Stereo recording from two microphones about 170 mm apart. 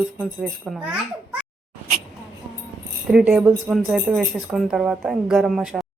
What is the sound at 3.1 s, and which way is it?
Speech, 5° right (ahead or behind).